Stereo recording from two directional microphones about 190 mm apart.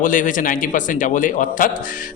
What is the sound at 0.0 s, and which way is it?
A man's voice, 45° left (ahead or behind).